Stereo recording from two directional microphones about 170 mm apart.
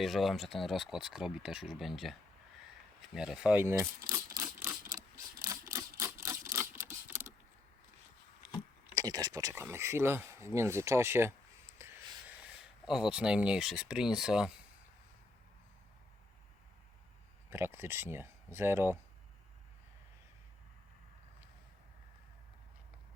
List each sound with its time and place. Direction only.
0.0 s speech: centre (ahead or behind)
3.2 s speech: 5° right (ahead or behind)
4.6 s a sound: 20° right (ahead or behind)
9.0 s speech: 25° right (ahead or behind)
11.8 s a sound: 15° right (ahead or behind)
12.8 s speech: 5° right (ahead or behind)
17.5 s speech: 15° right (ahead or behind)